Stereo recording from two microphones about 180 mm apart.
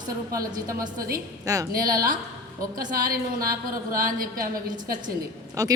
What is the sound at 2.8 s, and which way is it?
Speech, 55° right (ahead or behind).